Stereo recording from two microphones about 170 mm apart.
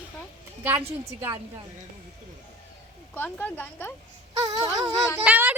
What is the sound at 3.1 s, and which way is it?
Speech, 10° left (ahead or behind).